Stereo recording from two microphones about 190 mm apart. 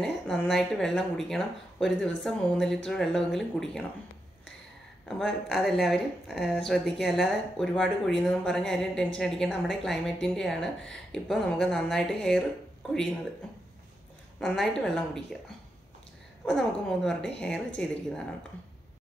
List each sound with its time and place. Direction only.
0.0 s speech: centre (ahead or behind)
5.0 s speech: centre (ahead or behind)
14.4 s speech: centre (ahead or behind)